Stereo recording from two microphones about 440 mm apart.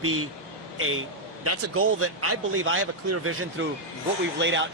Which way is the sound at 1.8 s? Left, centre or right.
Right.